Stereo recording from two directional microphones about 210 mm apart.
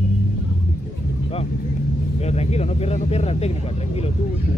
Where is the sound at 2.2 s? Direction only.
30° left (ahead or behind).